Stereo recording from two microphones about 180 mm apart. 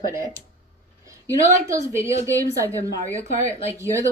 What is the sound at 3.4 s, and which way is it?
Speech, 35° left (ahead or behind).